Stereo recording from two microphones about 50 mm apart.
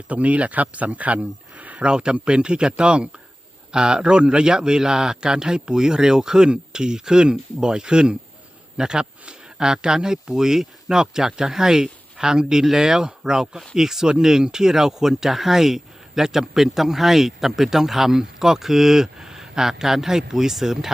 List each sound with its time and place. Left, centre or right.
0.1 s speech: right
1.9 s speech: centre